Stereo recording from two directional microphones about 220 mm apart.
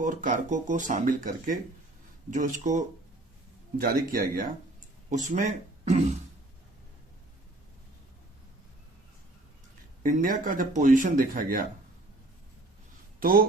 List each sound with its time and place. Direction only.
0.0 s speech: 35° right (ahead or behind)
10.0 s speech: 35° right (ahead or behind)
13.1 s speech: 40° right (ahead or behind)